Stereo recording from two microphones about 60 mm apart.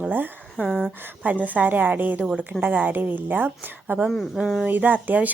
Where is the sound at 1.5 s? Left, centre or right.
Right.